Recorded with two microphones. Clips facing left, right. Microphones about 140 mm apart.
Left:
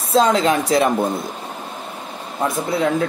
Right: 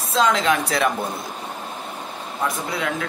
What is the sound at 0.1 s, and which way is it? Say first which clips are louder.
Speech: left 4 dB; 40° left (ahead or behind).